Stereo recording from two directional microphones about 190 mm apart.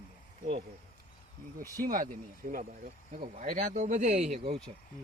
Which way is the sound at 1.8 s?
50° right (ahead or behind).